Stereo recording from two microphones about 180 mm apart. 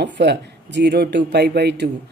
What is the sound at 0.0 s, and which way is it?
Speech, 70° right (ahead or behind).